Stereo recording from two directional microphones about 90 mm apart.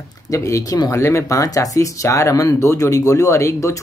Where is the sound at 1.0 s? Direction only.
30° left (ahead or behind).